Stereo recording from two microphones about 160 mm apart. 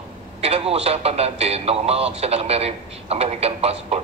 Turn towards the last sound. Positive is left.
turn(degrees=-40)  # may be behind; listen again after turning